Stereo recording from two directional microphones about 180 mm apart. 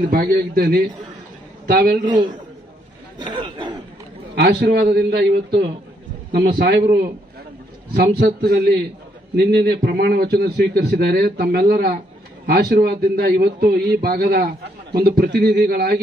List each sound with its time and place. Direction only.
0.0 s a man's voice: 55° right (ahead or behind)
2.0 s speech: 25° right (ahead or behind)
4.4 s a man's voice: 65° right (ahead or behind)
7.9 s a man's voice: 60° right (ahead or behind)